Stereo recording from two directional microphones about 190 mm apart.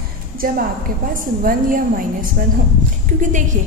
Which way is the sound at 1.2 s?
45° right (ahead or behind).